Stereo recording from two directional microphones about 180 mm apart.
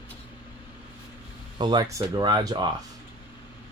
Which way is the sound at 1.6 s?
25° right (ahead or behind).